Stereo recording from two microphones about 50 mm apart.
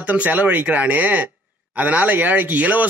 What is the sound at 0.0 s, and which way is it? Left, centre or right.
Speech, right.